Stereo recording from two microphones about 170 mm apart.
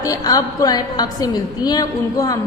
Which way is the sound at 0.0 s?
20° left (ahead or behind).